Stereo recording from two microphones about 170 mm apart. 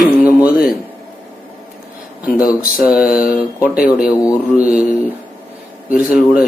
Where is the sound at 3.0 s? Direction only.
60° left (ahead or behind).